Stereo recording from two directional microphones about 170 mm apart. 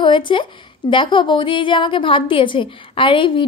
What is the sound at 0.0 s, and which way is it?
A woman's voice, 30° left (ahead or behind).